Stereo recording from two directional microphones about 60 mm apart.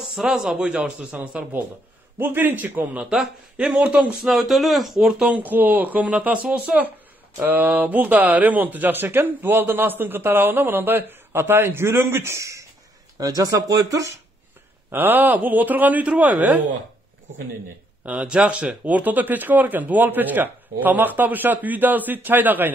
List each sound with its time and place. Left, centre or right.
0.1 s a man's voice: centre
2.1 s speech: right
3.0 s a man's voice: centre
4.2 s speech: centre
5.3 s a man's voice: right
12.4 s speech: right
13.2 s speech: right
14.9 s a man's voice: right
18.0 s a man's voice: right